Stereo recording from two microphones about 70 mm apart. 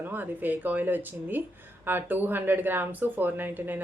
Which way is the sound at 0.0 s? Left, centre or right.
Right.